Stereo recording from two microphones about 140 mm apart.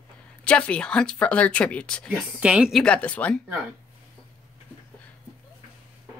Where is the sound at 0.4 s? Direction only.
10° left (ahead or behind).